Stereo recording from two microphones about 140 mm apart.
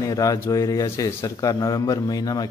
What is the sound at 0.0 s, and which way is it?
Speech, 25° left (ahead or behind).